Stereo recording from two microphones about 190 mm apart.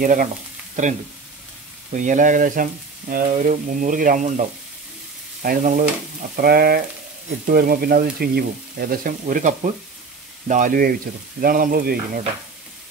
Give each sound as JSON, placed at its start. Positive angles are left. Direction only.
{"t": 0.0, "sound": "frying", "side_deg": -45}
{"t": 2.0, "sound": "frying", "side_deg": -40}